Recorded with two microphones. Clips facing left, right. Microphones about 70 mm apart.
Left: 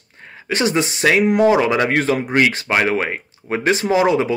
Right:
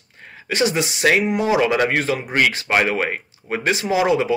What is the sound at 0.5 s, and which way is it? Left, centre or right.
Speech, left.